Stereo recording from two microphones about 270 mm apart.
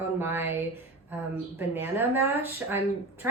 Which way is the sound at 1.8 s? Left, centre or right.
Centre.